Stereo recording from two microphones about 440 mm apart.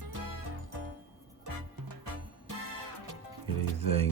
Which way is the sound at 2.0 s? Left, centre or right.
Right.